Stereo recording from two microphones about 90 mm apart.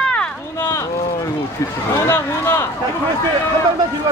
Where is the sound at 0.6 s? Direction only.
35° left (ahead or behind).